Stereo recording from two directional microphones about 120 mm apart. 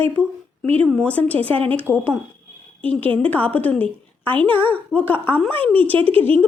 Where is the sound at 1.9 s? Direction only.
10° right (ahead or behind).